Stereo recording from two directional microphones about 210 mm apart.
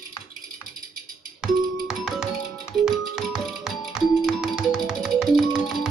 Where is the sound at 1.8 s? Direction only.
Centre (ahead or behind).